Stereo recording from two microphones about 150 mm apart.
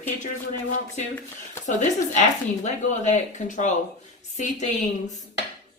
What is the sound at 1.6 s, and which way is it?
Speech, 55° left (ahead or behind).